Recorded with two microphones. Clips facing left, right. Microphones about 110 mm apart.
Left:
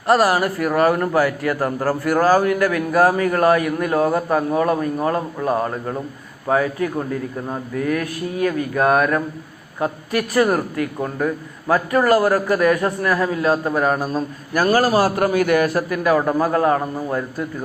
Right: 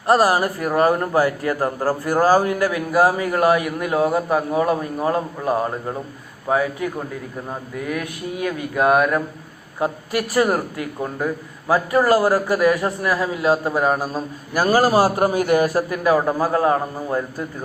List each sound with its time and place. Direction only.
0.1 s a man's voice: 15° right (ahead or behind)
2.2 s a man's voice: 30° right (ahead or behind)
2.6 s a man's voice: 15° right (ahead or behind)
16.1 s a man's voice: 10° right (ahead or behind)